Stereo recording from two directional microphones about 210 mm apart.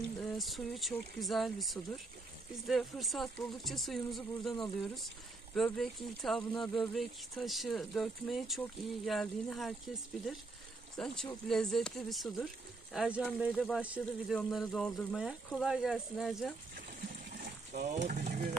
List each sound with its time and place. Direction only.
0.2 s speech: centre (ahead or behind)
11.0 s speech: 5° left (ahead or behind)
18.0 s speech: 35° right (ahead or behind)